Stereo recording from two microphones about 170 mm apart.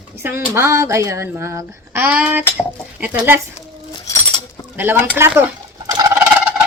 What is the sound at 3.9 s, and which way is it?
Chink, 20° left (ahead or behind).